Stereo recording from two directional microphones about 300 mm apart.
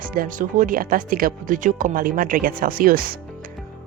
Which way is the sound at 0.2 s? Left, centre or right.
Right.